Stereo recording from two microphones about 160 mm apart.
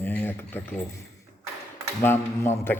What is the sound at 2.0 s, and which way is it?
Speech, 15° left (ahead or behind).